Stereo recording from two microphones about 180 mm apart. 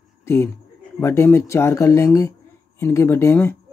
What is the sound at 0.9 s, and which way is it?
Speech, 15° left (ahead or behind).